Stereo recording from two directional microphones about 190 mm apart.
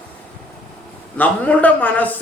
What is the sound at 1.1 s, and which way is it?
Speech, 10° left (ahead or behind).